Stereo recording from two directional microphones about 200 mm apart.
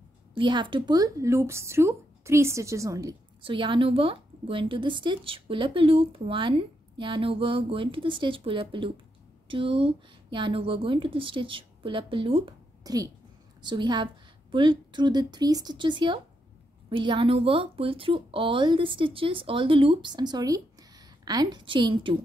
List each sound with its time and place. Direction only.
0.3 s speech: 25° right (ahead or behind)